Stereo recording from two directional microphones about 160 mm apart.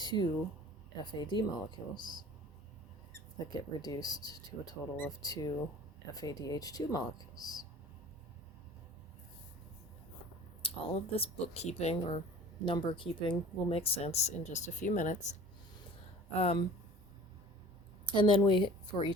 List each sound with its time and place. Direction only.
0.0 s speech: 25° left (ahead or behind)
3.3 s speech: 25° left (ahead or behind)
10.6 s speech: 35° left (ahead or behind)
12.6 s speech: 30° left (ahead or behind)
18.1 s speech: 30° left (ahead or behind)